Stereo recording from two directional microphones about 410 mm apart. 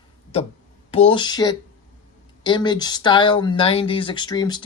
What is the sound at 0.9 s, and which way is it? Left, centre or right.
Speech, centre.